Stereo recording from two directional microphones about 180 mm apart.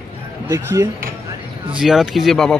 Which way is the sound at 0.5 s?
15° right (ahead or behind).